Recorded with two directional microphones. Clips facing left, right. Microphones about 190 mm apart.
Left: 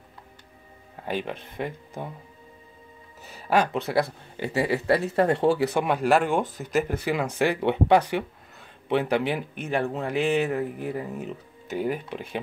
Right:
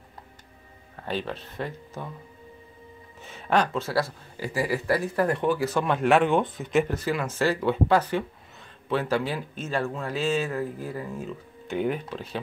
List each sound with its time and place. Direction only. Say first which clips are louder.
1.0 s speech: left 1 dB; 15° left (ahead or behind)
3.3 s speech: left 1 dB; 5° left (ahead or behind); by 5.7 s 30° left (ahead or behind)
5.7 s speech: left 1 dB; 15° left (ahead or behind)
5.9 s speech: right 3 dB; centre (ahead or behind); by 11.3 s 20° left (ahead or behind)
11.7 s speech: right 1 dB; 5° left (ahead or behind)